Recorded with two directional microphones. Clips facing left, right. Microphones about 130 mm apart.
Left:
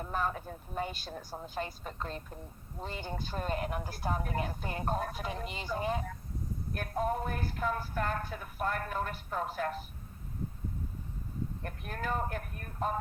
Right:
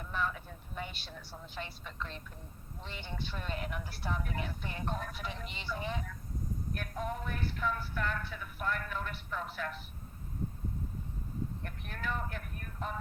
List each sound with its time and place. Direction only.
0.0 s speech: 40° left (ahead or behind)
11.6 s speech: 40° left (ahead or behind)